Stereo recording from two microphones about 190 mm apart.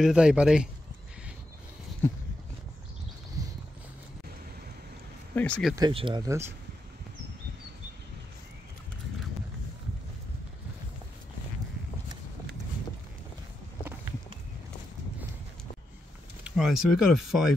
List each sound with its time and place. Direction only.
0.0 s speech: 5° right (ahead or behind)
2.0 s a sound: 10° left (ahead or behind)
5.3 s speech: 5° left (ahead or behind)
5.8 s speech: 25° right (ahead or behind)
16.4 s speech: centre (ahead or behind)